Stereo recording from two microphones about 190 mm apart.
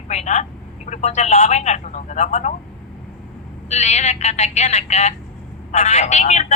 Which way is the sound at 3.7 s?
35° left (ahead or behind).